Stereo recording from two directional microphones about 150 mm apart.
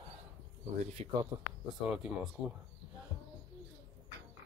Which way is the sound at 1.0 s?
40° right (ahead or behind).